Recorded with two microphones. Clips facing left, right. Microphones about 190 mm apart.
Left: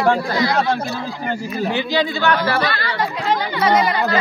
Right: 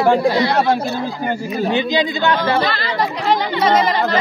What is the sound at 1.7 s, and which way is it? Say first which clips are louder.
Speech: right 2 dB; 20° right (ahead or behind).